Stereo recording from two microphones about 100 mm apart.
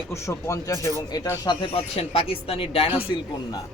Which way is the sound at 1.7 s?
75° left (ahead or behind).